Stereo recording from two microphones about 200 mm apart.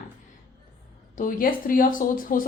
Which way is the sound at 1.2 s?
45° left (ahead or behind).